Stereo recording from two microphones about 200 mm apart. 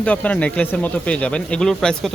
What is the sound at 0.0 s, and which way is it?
Speech, 5° left (ahead or behind).